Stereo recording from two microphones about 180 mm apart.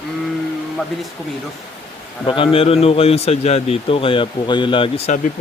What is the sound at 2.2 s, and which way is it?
A man's voice, 30° left (ahead or behind).